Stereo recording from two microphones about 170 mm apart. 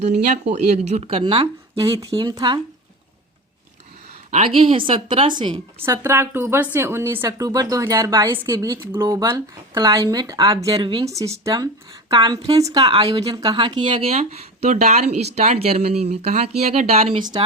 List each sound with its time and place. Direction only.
0.0 s speech: 40° right (ahead or behind); by 2.6 s 25° right (ahead or behind)
4.3 s speech: 35° right (ahead or behind)
5.9 s speech: 15° right (ahead or behind); by 11.0 s 30° right (ahead or behind)
11.0 s speech: 20° right (ahead or behind); by 17.2 s 35° right (ahead or behind)